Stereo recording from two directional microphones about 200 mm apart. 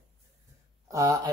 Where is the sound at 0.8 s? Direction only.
15° right (ahead or behind).